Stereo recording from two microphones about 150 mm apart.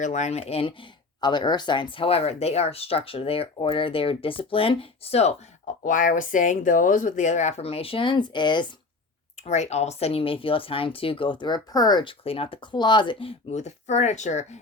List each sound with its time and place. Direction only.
0.0 s speech: 50° left (ahead or behind)
1.2 s speech: 30° left (ahead or behind)
5.8 s speech: 60° left (ahead or behind); by 8.6 s 30° left (ahead or behind)
9.5 s speech: 50° left (ahead or behind); by 12.1 s 25° left (ahead or behind)
12.2 s speech: 40° left (ahead or behind)